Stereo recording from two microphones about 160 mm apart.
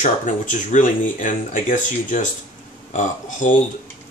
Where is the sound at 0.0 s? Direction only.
50° left (ahead or behind).